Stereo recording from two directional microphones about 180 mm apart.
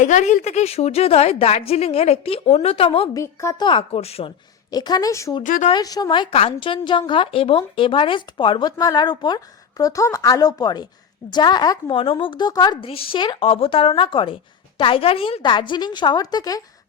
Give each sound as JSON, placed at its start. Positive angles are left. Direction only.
{"t": 0.0, "sound": "a woman's voice", "side_deg": 45}
{"t": 3.2, "sound": "speech", "side_deg": 20}
{"t": 4.7, "sound": "speech", "side_deg": 20}
{"t": 5.4, "sound": "speech", "side_deg": 45}
{"t": 5.6, "sound": "speech", "side_deg": 20}